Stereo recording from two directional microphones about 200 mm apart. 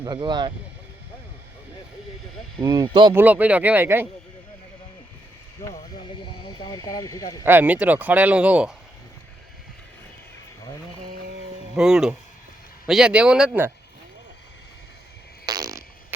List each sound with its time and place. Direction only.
0.0 s speech: 25° right (ahead or behind)
2.6 s speech: 20° right (ahead or behind)
3.2 s speech: 10° right (ahead or behind)
6.4 s speech: 20° left (ahead or behind)
7.4 s speech: 10° right (ahead or behind)
11.8 s speech: 5° right (ahead or behind)
15.4 s fart: 20° right (ahead or behind)